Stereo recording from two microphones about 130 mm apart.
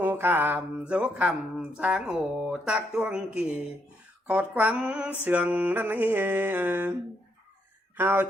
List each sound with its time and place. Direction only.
0.0 s speech: 15° right (ahead or behind)
7.9 s speech: 15° right (ahead or behind)